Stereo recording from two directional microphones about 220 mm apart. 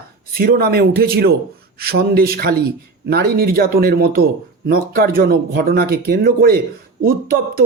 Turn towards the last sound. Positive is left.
turn(degrees=-40)  # may be behind; listen again after turning